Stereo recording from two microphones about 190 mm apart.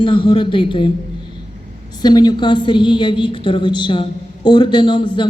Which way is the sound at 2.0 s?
20° left (ahead or behind).